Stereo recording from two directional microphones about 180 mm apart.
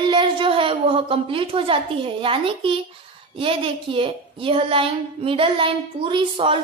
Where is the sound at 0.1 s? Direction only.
25° right (ahead or behind).